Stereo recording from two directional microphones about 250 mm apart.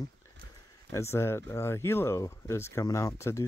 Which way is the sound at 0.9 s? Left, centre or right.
Centre.